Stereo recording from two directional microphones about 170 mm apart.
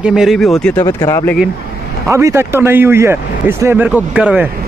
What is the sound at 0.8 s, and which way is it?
Speech, 15° left (ahead or behind).